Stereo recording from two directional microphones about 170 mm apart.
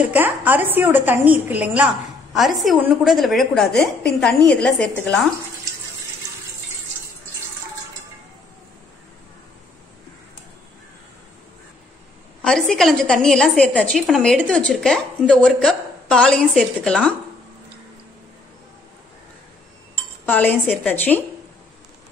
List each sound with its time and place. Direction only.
0.0 s a woman's voice: 10° right (ahead or behind)
12.4 s a woman's voice: 5° left (ahead or behind)
20.2 s a woman's voice: 10° left (ahead or behind)